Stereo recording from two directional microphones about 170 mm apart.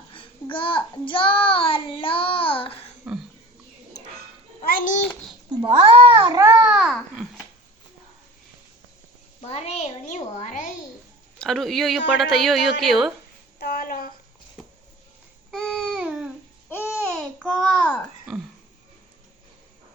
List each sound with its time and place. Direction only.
0.1 s child singing: 30° left (ahead or behind)
3.0 s a sound: 5° right (ahead or behind)
4.6 s babbling: 55° left (ahead or behind)
5.5 s a child's voice: 30° right (ahead or behind)
6.6 s babbling: 5° right (ahead or behind)
9.4 s a child's voice: 40° left (ahead or behind)
11.3 s a woman's voice: centre (ahead or behind)
13.6 s a sound: 60° left (ahead or behind)
15.5 s babbling: centre (ahead or behind)
16.6 s babbling: 15° left (ahead or behind)
17.1 s a sound: 5° left (ahead or behind)